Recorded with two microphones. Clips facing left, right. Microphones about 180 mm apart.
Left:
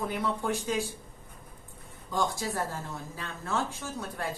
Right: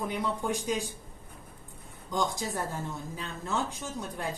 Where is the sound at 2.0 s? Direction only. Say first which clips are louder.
Even; 20° right (ahead or behind).